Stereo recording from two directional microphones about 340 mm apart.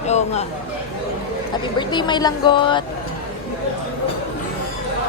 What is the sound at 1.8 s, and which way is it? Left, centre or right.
Speech, centre.